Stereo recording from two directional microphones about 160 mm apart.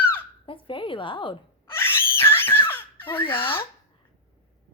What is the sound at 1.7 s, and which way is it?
Screaming, 15° left (ahead or behind).